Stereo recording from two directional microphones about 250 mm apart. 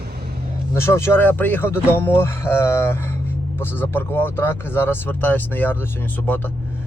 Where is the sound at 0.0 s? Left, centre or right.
Right.